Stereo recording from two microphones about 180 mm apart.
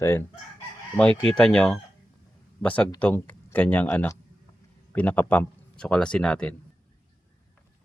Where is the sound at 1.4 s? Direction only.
5° left (ahead or behind).